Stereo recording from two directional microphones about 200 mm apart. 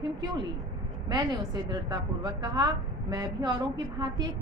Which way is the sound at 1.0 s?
20° right (ahead or behind).